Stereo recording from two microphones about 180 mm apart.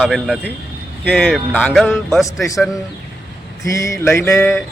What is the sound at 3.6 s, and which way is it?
Speech, 15° left (ahead or behind).